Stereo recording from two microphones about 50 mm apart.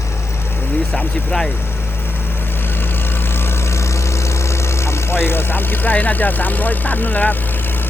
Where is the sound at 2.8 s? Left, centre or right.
Left.